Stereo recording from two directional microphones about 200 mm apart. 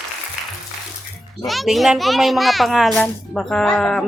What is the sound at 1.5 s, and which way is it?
A child's voice, centre (ahead or behind).